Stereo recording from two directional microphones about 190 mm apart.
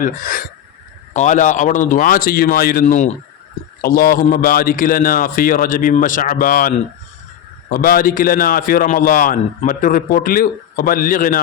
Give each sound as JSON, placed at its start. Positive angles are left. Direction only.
{"t": 0.0, "sound": "a man's voice", "side_deg": 50}